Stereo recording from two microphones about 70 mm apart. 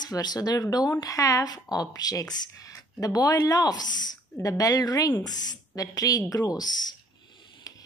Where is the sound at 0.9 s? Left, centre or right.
Left.